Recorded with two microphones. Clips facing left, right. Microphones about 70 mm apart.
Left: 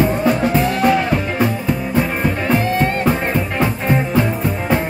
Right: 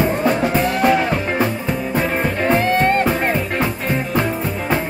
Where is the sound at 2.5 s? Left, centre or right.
Right.